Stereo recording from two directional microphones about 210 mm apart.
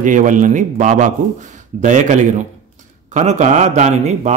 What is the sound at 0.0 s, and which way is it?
A man's voice, 40° right (ahead or behind).